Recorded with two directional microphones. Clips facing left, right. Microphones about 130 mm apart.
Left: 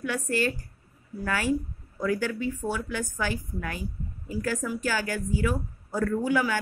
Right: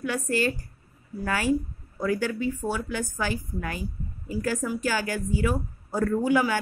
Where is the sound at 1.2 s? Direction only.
10° right (ahead or behind).